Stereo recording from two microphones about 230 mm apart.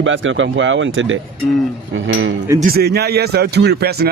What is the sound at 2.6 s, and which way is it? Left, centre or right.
A man's voice, right.